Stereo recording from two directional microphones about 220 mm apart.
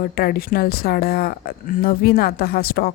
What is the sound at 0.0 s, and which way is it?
Speech, 45° left (ahead or behind).